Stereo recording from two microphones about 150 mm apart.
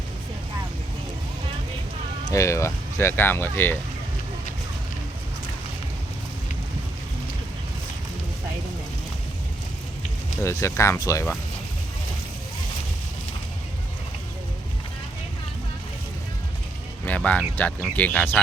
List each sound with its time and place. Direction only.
2.3 s speech: 20° left (ahead or behind)
10.4 s speech: 20° left (ahead or behind)
17.1 s speech: 10° left (ahead or behind)